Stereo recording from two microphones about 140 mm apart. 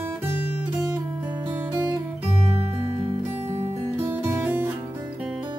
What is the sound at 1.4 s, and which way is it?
Music, 15° right (ahead or behind).